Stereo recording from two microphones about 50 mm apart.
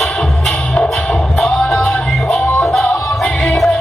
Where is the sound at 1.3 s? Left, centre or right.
Centre.